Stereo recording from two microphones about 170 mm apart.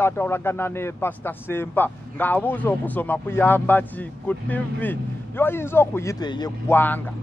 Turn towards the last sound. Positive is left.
turn(degrees=10)  # may be behind; listen again after turning